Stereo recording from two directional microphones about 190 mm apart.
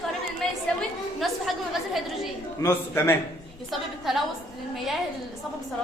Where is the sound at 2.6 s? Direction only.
10° left (ahead or behind).